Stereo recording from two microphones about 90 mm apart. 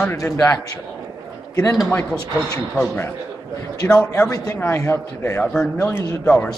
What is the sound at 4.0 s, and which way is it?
A man's voice, 30° left (ahead or behind).